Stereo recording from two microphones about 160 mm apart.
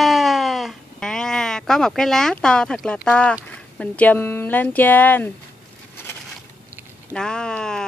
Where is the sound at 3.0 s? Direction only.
5° left (ahead or behind).